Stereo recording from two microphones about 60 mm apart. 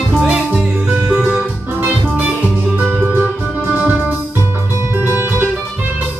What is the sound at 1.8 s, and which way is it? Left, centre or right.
Music, right.